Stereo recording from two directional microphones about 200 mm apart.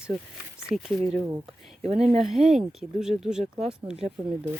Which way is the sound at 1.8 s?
30° right (ahead or behind).